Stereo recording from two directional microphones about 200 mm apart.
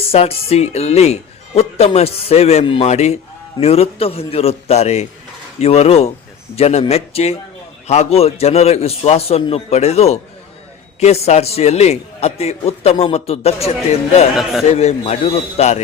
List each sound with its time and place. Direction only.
0.0 s a man's voice: 30° left (ahead or behind)